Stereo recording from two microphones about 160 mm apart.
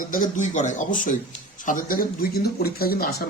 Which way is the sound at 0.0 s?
55° left (ahead or behind).